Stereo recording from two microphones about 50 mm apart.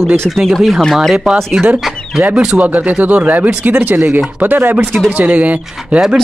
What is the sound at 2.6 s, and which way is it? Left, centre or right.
Speech, right.